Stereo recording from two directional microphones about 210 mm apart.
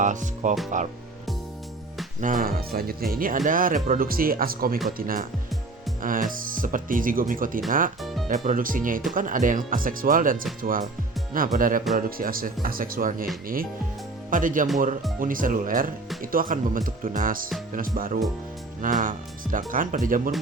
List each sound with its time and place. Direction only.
0.0 s speech: 35° right (ahead or behind)
2.2 s speech: 40° right (ahead or behind)
8.0 s music: centre (ahead or behind)
8.3 s speech: 40° right (ahead or behind)
14.3 s speech: 40° right (ahead or behind)